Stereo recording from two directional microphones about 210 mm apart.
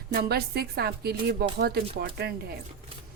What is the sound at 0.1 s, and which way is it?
A woman's voice, 50° right (ahead or behind).